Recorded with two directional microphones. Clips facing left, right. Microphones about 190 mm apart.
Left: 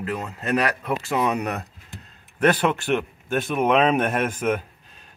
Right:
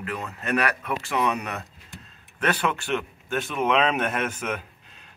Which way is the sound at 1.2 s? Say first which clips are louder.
Left 3 dB; 40° left (ahead or behind).